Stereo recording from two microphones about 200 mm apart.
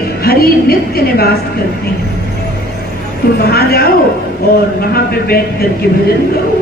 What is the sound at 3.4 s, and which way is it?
Speech, 50° left (ahead or behind).